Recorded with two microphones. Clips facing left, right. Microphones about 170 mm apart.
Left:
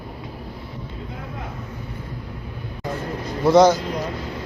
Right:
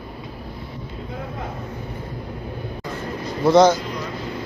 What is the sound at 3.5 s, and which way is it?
Speech, 10° left (ahead or behind).